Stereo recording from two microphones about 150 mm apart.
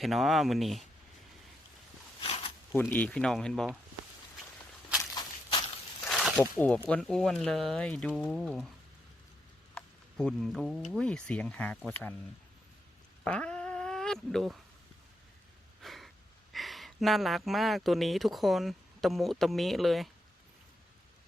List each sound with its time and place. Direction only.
0.0 s speech: centre (ahead or behind)
2.2 s zipper: 40° left (ahead or behind)
2.7 s speech: 10° left (ahead or behind)
5.1 s walk: 30° left (ahead or behind)
6.1 s a sound: centre (ahead or behind)
6.4 s speech: 10° left (ahead or behind)
9.7 s speech: 5° left (ahead or behind)
13.2 s a sound: 5° left (ahead or behind)
15.8 s speech: centre (ahead or behind)